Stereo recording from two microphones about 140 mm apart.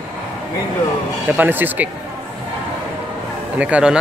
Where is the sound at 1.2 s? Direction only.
15° right (ahead or behind).